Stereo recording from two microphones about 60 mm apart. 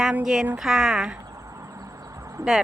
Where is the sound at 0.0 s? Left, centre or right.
Centre.